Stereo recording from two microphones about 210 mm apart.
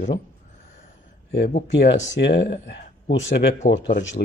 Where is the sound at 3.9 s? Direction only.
40° left (ahead or behind).